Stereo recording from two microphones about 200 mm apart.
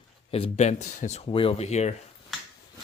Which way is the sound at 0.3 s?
30° left (ahead or behind).